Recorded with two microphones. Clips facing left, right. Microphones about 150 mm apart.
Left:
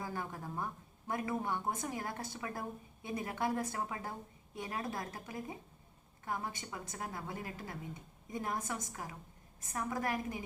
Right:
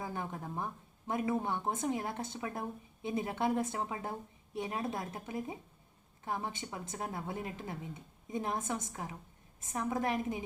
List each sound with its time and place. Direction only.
0.0 s speech: 20° right (ahead or behind)